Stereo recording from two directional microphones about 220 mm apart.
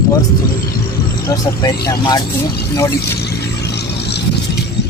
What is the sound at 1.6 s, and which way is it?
Speech, 20° left (ahead or behind).